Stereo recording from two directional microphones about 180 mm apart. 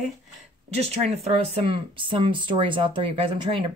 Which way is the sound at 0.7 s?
35° right (ahead or behind).